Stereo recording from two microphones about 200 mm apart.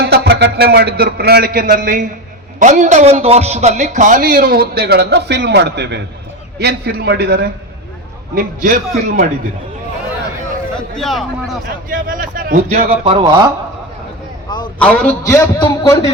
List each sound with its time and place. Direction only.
0.0 s a man's voice: 55° right (ahead or behind)
10.9 s speech: centre (ahead or behind)
11.9 s a man's voice: 45° right (ahead or behind)
13.1 s speech: 25° right (ahead or behind)
14.8 s a man's voice: 10° left (ahead or behind)